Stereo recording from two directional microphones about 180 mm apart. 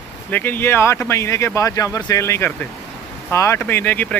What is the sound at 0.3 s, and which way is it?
Speech, 10° left (ahead or behind).